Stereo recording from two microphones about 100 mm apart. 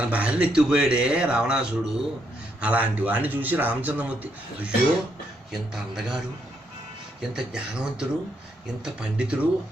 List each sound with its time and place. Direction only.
0.0 s speech: 15° right (ahead or behind)
5.5 s a man's voice: 5° right (ahead or behind)